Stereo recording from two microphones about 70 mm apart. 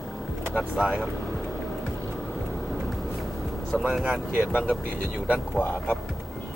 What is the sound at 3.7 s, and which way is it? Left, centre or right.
Speech, centre.